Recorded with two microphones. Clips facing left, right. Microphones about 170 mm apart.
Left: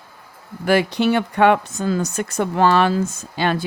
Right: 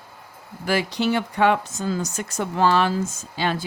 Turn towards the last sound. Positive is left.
turn(degrees=60)  # may be behind; listen again after turning